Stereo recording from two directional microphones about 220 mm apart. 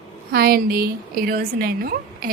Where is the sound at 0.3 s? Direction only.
45° right (ahead or behind).